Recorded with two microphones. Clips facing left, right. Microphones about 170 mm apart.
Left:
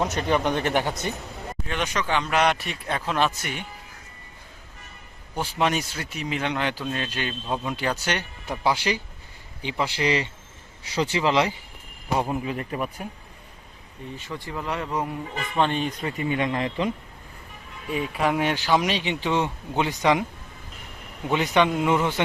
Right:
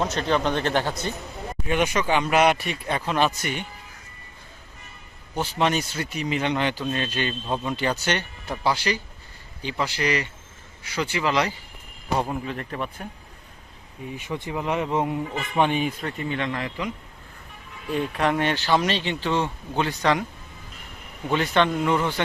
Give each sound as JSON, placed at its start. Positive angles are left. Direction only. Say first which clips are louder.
{"t": 0.0, "sound": "speech", "louder": "even", "side_deg": 15}
{"t": 1.6, "sound": "speech", "louder": "right 5 dB", "side_deg": -10}
{"t": 5.3, "sound": "speech", "louder": "right 1 dB", "side_deg": 5}
{"t": 8.7, "sound": "speech", "louder": "even", "side_deg": 20}
{"t": 12.0, "sound": "speech", "louder": "left 1 dB", "side_deg": 10}
{"t": 14.3, "sound": "speech", "louder": "right 4 dB", "side_deg": -20}
{"t": 16.0, "sound": "speech", "louder": "left 2 dB", "side_deg": 15}
{"t": 17.8, "sound": "speech", "louder": "right 1 dB", "side_deg": 5}
{"t": 21.2, "sound": "speech", "louder": "even", "side_deg": 15}